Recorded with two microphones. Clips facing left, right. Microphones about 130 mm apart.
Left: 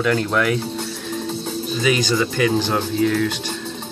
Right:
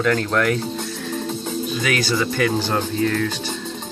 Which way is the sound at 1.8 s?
20° left (ahead or behind).